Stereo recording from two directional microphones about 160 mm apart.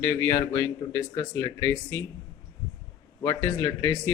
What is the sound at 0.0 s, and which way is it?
Speech, 15° left (ahead or behind).